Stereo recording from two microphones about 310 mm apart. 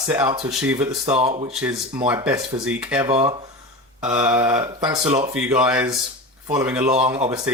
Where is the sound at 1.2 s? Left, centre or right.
Centre.